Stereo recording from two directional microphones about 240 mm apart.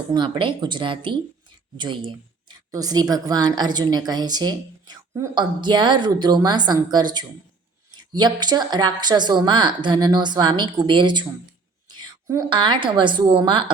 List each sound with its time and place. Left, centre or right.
0.1 s a woman's voice: centre